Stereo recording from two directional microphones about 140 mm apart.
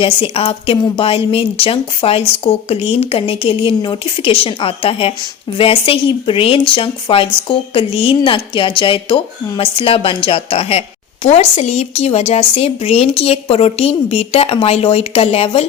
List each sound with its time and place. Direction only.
0.0 s a woman's voice: 40° left (ahead or behind)